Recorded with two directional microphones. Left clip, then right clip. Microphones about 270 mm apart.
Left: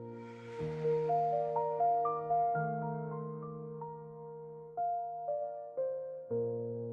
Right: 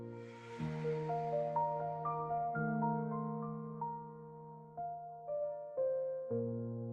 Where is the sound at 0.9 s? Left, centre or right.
Centre.